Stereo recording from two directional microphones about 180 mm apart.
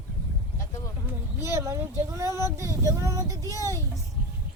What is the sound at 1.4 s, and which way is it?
Speech, 15° right (ahead or behind).